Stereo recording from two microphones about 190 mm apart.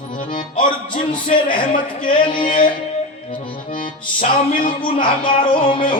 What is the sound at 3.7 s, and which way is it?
Music, 45° left (ahead or behind).